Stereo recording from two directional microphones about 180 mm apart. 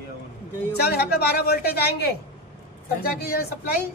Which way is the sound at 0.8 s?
60° left (ahead or behind).